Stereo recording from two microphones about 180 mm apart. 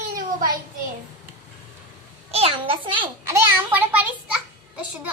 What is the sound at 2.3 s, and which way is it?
Speech, 35° right (ahead or behind).